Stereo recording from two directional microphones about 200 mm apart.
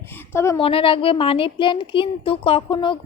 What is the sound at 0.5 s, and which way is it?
A woman's voice, 25° left (ahead or behind).